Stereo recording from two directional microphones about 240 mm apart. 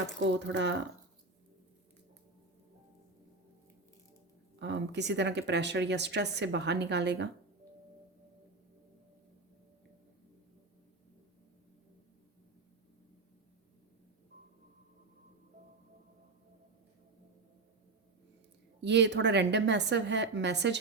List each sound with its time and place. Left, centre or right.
0.2 s speech: right
4.6 s speech: right
18.8 s speech: right